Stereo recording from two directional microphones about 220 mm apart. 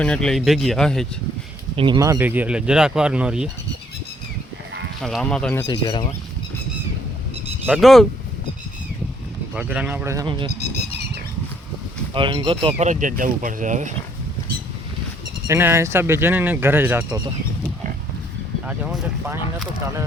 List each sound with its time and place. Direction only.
0.0 s speech: 5° left (ahead or behind)
1.7 s speech: 20° right (ahead or behind); by 3.5 s 5° right (ahead or behind)
5.0 s speech: centre (ahead or behind)
5.6 s speech: 20° left (ahead or behind)
7.7 s speech: centre (ahead or behind)
9.6 s speech: 5° right (ahead or behind)
12.1 s speech: 20° right (ahead or behind)
12.8 s speech: 35° right (ahead or behind)
15.4 s speech: 10° right (ahead or behind)
18.6 s speech: 5° right (ahead or behind)